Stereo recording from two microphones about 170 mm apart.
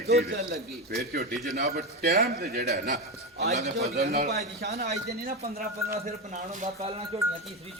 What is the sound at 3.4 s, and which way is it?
Speech, 40° right (ahead or behind).